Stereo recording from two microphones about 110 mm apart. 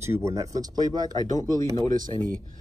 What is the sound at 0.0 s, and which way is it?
Speech, 25° right (ahead or behind).